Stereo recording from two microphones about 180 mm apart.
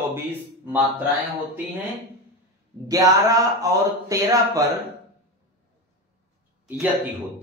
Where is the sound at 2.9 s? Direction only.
20° right (ahead or behind).